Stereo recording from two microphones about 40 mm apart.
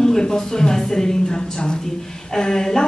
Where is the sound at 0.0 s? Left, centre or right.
Centre.